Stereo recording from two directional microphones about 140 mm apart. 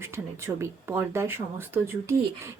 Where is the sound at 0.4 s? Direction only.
20° right (ahead or behind).